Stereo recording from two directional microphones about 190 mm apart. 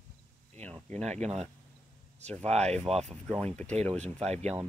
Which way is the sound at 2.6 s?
5° left (ahead or behind).